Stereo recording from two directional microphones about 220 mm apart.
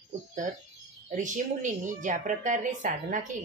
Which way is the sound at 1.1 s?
35° right (ahead or behind).